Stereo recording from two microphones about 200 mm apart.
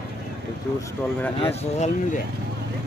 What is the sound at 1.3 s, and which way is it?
Speech, 35° left (ahead or behind).